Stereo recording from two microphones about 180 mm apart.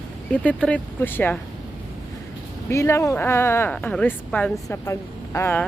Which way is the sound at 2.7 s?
15° left (ahead or behind).